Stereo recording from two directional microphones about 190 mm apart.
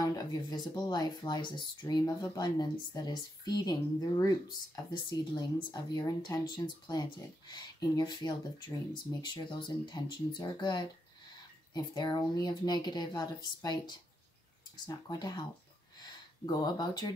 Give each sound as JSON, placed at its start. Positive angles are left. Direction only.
{"t": 0.0, "sound": "speech", "side_deg": 20}